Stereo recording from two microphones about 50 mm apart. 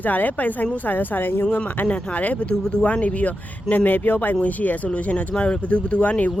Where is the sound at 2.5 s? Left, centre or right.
Centre.